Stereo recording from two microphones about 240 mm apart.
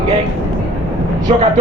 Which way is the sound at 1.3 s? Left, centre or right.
Right.